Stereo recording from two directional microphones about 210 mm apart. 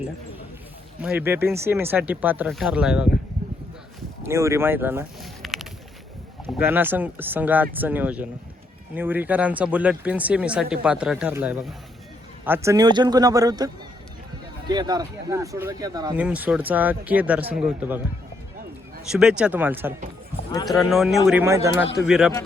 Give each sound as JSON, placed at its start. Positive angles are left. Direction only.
{"t": 1.0, "sound": "speech", "side_deg": -10}
{"t": 4.2, "sound": "speech", "side_deg": -15}
{"t": 14.7, "sound": "speech", "side_deg": -20}
{"t": 16.1, "sound": "speech", "side_deg": -5}
{"t": 19.0, "sound": "speech", "side_deg": -5}
{"t": 20.3, "sound": "clip-clop", "side_deg": -10}
{"t": 20.7, "sound": "speech", "side_deg": 0}
{"t": 22.0, "sound": "speech", "side_deg": -5}